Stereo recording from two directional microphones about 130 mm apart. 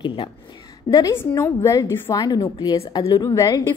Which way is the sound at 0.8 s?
25° left (ahead or behind).